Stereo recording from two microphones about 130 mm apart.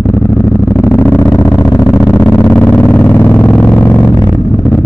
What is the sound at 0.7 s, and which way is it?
Vehicle, 20° left (ahead or behind).